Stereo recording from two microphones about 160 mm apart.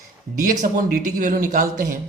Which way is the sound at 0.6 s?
60° right (ahead or behind).